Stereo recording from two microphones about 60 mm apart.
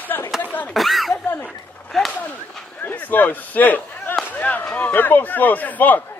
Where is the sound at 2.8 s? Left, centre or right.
Left.